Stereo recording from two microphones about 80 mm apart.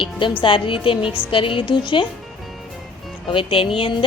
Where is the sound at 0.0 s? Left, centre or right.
Left.